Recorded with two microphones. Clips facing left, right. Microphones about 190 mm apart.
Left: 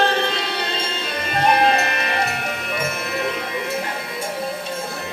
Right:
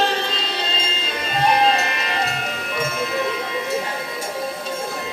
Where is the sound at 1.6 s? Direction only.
55° left (ahead or behind).